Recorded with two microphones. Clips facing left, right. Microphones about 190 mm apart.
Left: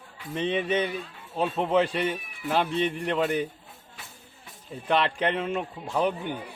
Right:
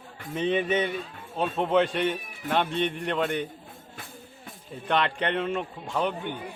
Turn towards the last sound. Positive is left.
turn(degrees=5)  # may be behind; listen again after turning